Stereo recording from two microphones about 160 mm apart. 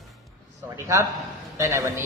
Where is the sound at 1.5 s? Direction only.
15° right (ahead or behind).